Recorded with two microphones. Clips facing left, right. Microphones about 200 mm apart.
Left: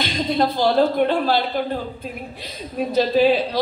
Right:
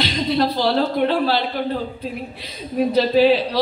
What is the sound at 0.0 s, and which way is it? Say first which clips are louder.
Speech: right 1 dB; 50° left (ahead or behind).